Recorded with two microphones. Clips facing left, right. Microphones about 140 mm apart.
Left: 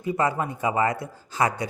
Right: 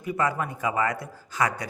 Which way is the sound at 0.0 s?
25° left (ahead or behind).